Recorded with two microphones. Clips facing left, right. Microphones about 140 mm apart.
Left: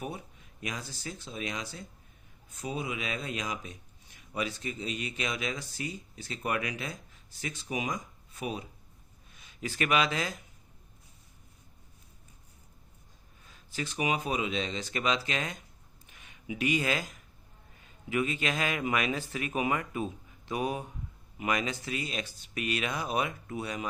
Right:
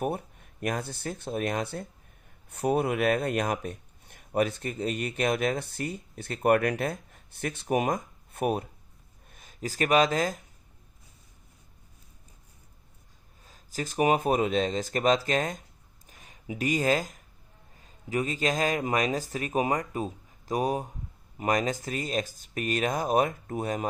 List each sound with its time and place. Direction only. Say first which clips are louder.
0.0 s speech: right 8 dB; 55° right (ahead or behind)
9.3 s speech: right 3 dB; 45° right (ahead or behind)
13.4 s speech: right 3 dB; 40° right (ahead or behind)
16.0 s a sound: right 1 dB; 40° right (ahead or behind)
17.7 s a man's voice: right 1 dB; 35° right (ahead or behind)